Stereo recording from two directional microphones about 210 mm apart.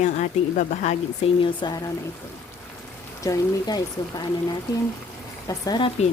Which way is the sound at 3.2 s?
15° left (ahead or behind).